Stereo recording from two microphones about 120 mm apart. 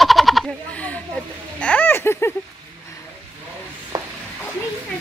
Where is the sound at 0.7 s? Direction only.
10° left (ahead or behind).